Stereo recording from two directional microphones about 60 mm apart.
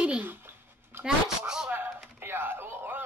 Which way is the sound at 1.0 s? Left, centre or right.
Centre.